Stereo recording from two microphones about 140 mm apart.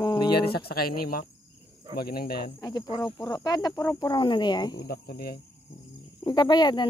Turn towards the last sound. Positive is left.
turn(degrees=30)  # may be behind; listen again after turning